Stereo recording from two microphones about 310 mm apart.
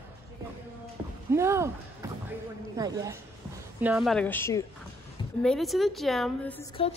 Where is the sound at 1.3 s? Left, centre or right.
Centre.